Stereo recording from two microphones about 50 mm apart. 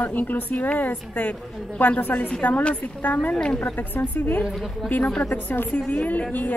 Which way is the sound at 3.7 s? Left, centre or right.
Left.